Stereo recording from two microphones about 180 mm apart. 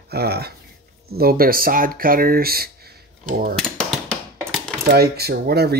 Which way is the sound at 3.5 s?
5° left (ahead or behind).